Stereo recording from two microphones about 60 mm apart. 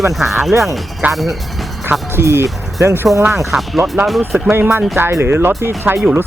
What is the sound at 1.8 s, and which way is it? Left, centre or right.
Speech, right.